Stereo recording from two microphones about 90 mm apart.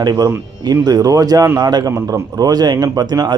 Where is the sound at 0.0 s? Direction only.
55° right (ahead or behind).